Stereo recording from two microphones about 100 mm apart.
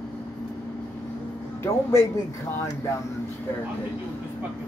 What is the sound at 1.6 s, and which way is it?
Speech, 25° left (ahead or behind).